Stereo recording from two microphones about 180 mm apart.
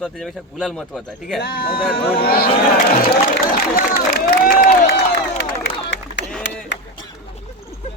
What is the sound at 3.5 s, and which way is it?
Speech, 55° left (ahead or behind).